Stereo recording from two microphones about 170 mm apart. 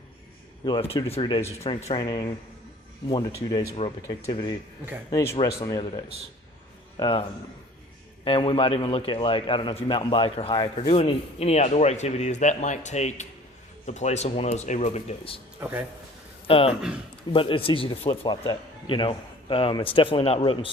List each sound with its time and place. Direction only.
0.6 s speech: 25° left (ahead or behind)
6.9 s a man's voice: 30° left (ahead or behind)
15.6 s speech: 15° right (ahead or behind)
16.5 s a man's voice: 35° left (ahead or behind)